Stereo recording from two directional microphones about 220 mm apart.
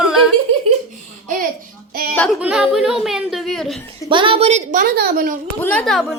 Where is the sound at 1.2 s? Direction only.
40° right (ahead or behind).